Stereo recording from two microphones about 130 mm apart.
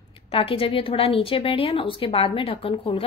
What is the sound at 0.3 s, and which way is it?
A woman's voice, 45° left (ahead or behind).